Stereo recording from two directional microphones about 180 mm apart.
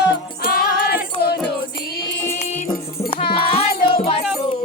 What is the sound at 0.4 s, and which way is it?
Music, 55° left (ahead or behind).